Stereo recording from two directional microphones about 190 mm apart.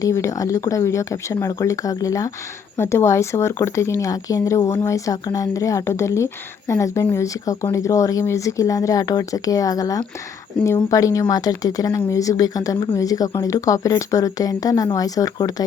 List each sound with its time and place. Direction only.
0.0 s speech: 15° left (ahead or behind)